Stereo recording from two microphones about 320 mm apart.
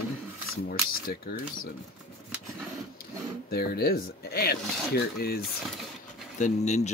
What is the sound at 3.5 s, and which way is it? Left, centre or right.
Speech, left.